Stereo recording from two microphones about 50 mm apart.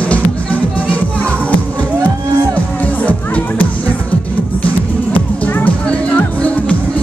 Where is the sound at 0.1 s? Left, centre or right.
Left.